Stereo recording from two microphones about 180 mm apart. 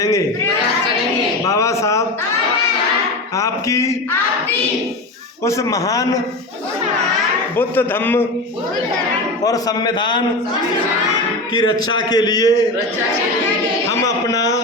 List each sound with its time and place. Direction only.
1.5 s a sound: 15° left (ahead or behind)
3.3 s a man's voice: 20° left (ahead or behind)
5.5 s a man's voice: 15° left (ahead or behind)
7.5 s a man's voice: 10° left (ahead or behind)
9.4 s a man's voice: 20° left (ahead or behind)
11.5 s a man's voice: 25° left (ahead or behind)
14.3 s a man's voice: 20° left (ahead or behind)